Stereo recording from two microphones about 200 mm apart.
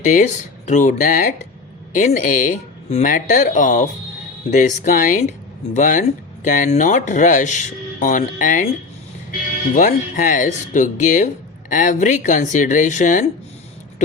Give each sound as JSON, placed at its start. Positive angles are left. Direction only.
{"t": 0.0, "sound": "speech", "side_deg": 35}
{"t": 9.7, "sound": "speech", "side_deg": 40}